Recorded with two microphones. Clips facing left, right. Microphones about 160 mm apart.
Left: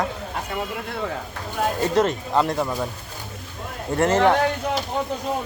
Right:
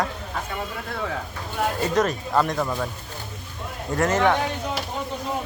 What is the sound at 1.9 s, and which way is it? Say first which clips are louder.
Speech: left 2 dB; 25° left (ahead or behind).